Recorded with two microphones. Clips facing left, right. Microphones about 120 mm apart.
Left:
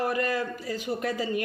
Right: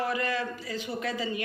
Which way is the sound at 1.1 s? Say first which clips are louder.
Left 3 dB; 45° left (ahead or behind).